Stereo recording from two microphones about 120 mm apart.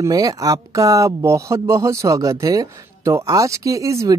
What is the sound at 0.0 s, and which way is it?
Speech, 30° right (ahead or behind).